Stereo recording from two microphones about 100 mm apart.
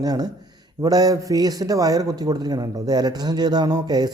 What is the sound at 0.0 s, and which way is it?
A man's voice, 40° right (ahead or behind).